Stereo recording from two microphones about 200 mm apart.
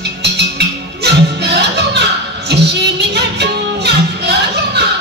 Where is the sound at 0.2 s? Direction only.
55° right (ahead or behind).